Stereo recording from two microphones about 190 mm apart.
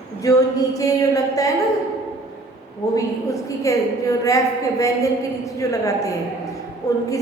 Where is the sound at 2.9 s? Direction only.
15° left (ahead or behind).